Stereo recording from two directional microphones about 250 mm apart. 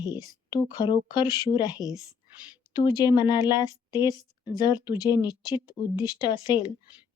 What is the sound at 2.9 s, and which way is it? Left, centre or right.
A woman's voice, centre.